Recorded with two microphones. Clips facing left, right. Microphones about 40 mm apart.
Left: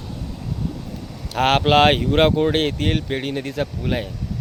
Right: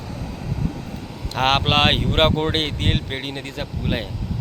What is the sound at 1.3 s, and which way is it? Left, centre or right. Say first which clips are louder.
Speech: left 2 dB; right.